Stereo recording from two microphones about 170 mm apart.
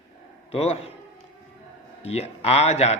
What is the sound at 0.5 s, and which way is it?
Speech, 40° left (ahead or behind).